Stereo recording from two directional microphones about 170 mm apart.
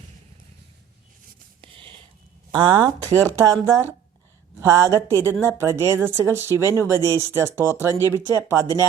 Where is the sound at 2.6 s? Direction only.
25° right (ahead or behind).